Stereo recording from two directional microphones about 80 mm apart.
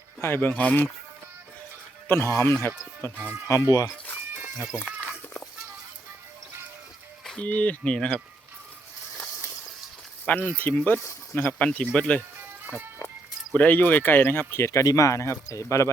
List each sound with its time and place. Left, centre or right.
0.2 s speech: left
2.0 s speech: left
3.5 s speech: left
4.9 s a sound: centre
7.3 s speech: centre
10.2 s speech: centre
11.6 s speech: centre
12.4 s music: right
13.5 s speech: left